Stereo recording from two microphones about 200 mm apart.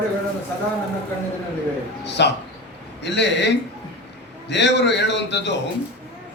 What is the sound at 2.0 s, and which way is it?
A man's voice, 60° left (ahead or behind).